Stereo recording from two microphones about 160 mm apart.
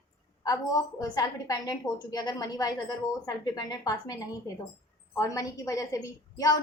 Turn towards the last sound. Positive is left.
turn(degrees=20)  # may be behind; listen again after turning